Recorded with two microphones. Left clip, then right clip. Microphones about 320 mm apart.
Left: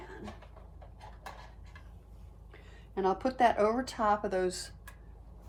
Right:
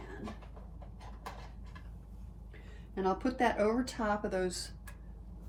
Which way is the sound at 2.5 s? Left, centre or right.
Centre.